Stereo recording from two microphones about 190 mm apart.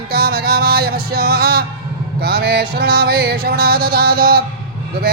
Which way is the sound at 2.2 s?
55° right (ahead or behind).